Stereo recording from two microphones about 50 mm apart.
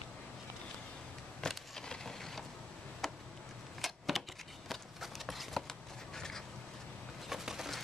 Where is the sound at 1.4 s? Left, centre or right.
Centre.